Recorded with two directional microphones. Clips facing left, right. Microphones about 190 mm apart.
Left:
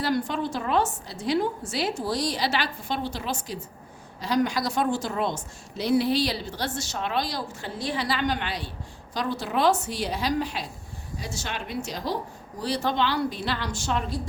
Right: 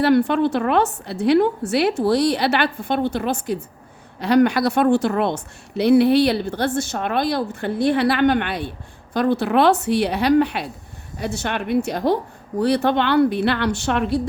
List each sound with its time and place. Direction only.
0.0 s a woman's voice: 65° right (ahead or behind)